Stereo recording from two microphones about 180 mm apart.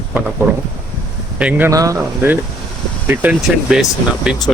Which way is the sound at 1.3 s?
5° right (ahead or behind).